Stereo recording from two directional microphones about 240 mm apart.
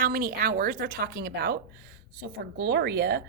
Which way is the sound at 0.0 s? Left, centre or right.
Right.